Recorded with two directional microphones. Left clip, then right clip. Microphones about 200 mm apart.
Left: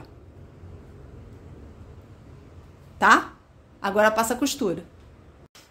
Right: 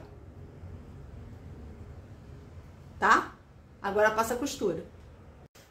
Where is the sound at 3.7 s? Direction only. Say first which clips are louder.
Left 5 dB; 55° left (ahead or behind).